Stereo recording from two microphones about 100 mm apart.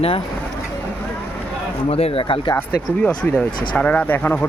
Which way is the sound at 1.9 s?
75° left (ahead or behind).